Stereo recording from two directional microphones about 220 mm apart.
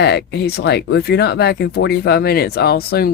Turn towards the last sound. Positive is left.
turn(degrees=45)  # may be behind; listen again after turning